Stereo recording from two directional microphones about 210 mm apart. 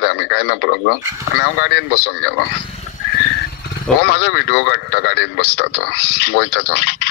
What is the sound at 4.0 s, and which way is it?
A man's voice, 50° left (ahead or behind).